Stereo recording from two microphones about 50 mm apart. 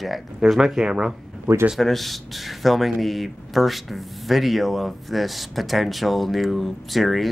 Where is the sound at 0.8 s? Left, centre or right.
Centre.